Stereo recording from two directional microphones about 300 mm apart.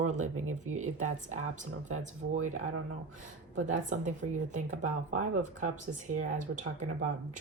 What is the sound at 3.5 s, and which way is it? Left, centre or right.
Speech, right.